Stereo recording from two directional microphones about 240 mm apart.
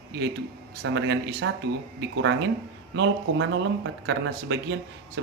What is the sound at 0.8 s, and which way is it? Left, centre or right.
Speech, right.